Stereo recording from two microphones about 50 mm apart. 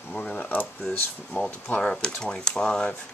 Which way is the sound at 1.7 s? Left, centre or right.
Centre.